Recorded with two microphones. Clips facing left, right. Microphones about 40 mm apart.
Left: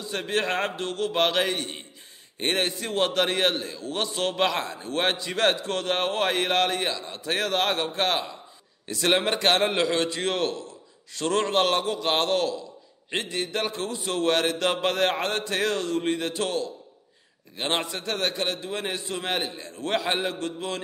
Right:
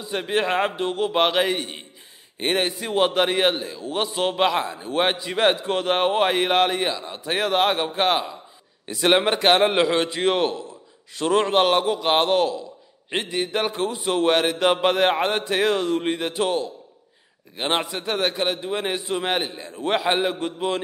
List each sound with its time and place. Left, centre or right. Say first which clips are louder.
0.0 s a man's voice: right 3 dB; centre